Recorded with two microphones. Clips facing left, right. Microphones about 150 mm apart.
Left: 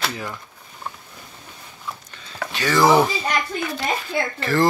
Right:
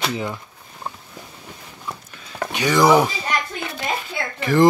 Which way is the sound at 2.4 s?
15° right (ahead or behind).